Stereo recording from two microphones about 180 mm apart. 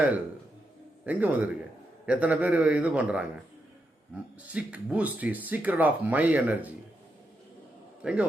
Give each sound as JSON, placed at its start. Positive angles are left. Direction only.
{"t": 1.0, "sound": "speech", "side_deg": -10}
{"t": 8.0, "sound": "speech", "side_deg": -5}